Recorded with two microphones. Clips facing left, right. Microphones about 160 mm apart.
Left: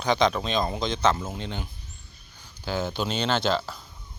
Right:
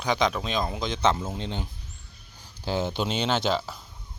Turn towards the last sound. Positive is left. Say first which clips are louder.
# left 1 dB
turn(degrees=-10)  # may be behind; listen again after turning